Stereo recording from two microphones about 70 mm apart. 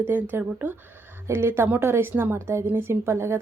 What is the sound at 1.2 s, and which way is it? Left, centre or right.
A woman's voice, right.